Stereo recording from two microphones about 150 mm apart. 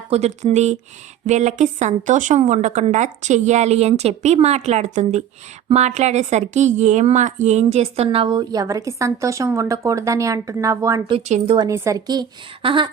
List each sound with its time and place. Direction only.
0.1 s a woman's voice: 45° right (ahead or behind); by 11.0 s 20° right (ahead or behind)
11.3 s a woman's voice: 50° right (ahead or behind)
11.7 s a woman's voice: 20° right (ahead or behind)